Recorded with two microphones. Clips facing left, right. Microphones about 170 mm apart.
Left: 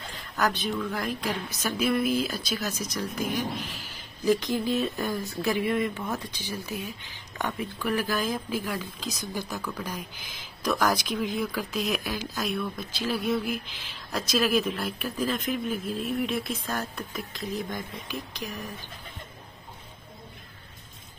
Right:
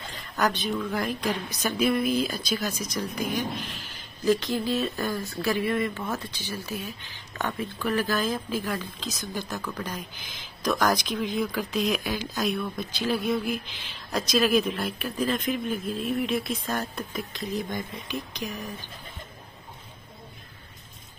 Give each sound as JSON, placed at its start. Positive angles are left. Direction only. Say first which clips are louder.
{"t": 0.4, "sound": "speech", "louder": "right 1 dB", "side_deg": 0}
{"t": 4.3, "sound": "speech", "louder": "even", "side_deg": 15}
{"t": 5.1, "sound": "speech", "louder": "even", "side_deg": 0}
{"t": 5.4, "sound": "speech", "louder": "even", "side_deg": 20}